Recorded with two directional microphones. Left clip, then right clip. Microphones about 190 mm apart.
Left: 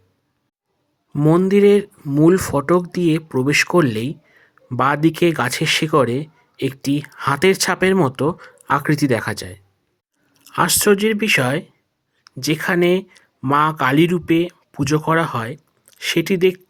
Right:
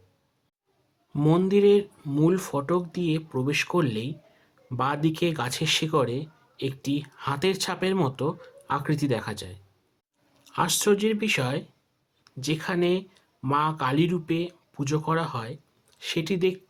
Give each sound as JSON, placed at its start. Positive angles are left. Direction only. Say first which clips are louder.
{"t": 1.1, "sound": "speech", "louder": "left 8 dB", "side_deg": 15}
{"t": 1.5, "sound": "speech", "louder": "left 5 dB", "side_deg": 30}